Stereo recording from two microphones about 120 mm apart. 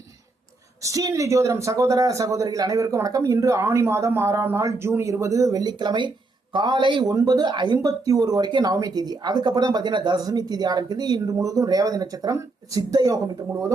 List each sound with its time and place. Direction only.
0.8 s speech: 30° right (ahead or behind)